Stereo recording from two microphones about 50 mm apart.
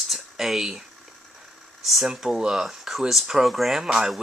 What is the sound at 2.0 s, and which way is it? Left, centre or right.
Speech, centre.